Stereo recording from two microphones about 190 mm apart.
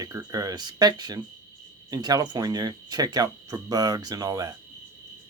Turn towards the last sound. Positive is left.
turn(degrees=-20)  # may be behind; listen again after turning